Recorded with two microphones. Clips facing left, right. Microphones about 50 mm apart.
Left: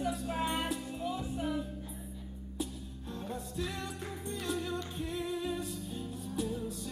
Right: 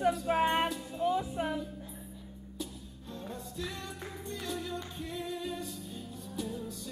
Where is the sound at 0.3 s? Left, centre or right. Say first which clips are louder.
Right 6 dB; right.